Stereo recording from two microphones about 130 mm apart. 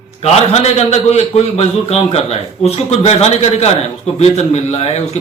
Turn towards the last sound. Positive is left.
turn(degrees=55)  # may be behind; listen again after turning